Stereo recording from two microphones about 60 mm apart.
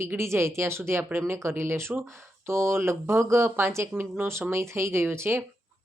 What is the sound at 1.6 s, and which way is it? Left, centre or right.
Speech, right.